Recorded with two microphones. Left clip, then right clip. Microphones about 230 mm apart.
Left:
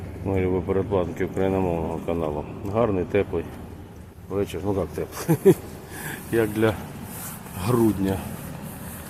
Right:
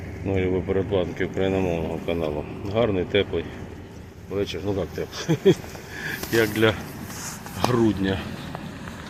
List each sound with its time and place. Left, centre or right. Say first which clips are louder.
0.3 s speech: even; centre
6.3 s speech: right 2 dB; centre